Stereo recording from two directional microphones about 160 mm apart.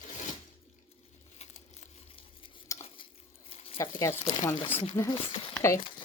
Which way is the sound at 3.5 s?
40° left (ahead or behind).